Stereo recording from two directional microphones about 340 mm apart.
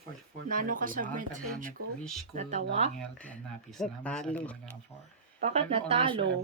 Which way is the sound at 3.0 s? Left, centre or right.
Centre.